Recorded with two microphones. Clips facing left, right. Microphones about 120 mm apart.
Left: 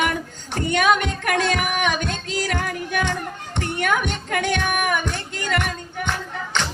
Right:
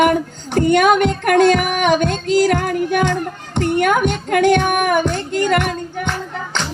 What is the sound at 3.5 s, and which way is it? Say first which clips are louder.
Child singing: right 7 dB; 50° right (ahead or behind).